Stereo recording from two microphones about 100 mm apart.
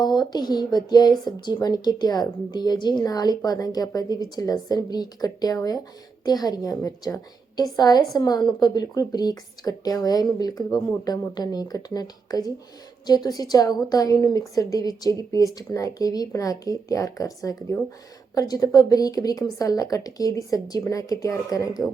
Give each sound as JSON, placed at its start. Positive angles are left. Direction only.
{"t": 0.0, "sound": "a woman's voice", "side_deg": 45}